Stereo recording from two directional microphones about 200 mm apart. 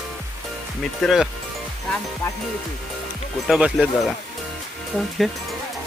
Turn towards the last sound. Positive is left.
turn(degrees=0)  # may be behind; listen again after turning